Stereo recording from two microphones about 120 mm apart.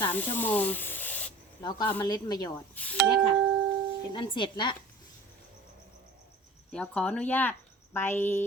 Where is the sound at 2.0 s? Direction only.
35° left (ahead or behind).